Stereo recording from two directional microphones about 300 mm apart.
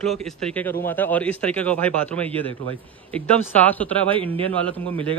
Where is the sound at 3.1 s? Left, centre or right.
Centre.